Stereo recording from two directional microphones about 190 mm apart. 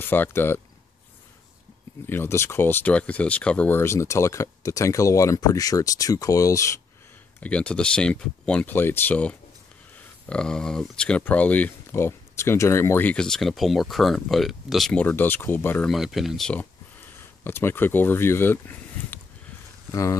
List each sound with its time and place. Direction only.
0.1 s speech: 10° left (ahead or behind)
2.0 s speech: 10° left (ahead or behind)
15.9 s speech: centre (ahead or behind); by 20.2 s 15° left (ahead or behind)